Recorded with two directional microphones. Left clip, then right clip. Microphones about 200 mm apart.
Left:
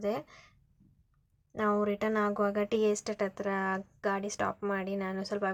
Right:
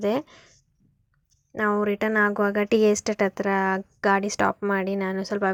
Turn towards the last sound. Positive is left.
turn(degrees=-30)  # may be behind; listen again after turning